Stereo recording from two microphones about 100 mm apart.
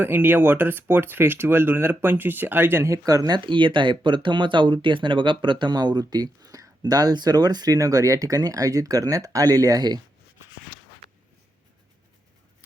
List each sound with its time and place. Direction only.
0.0 s speech: 20° right (ahead or behind)
3.1 s speech: 40° right (ahead or behind)